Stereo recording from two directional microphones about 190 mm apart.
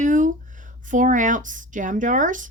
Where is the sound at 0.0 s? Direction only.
40° right (ahead or behind).